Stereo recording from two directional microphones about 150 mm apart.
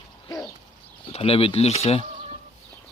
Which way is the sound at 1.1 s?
40° left (ahead or behind).